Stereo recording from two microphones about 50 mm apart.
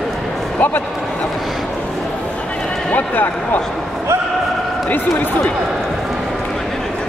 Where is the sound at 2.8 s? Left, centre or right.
Left.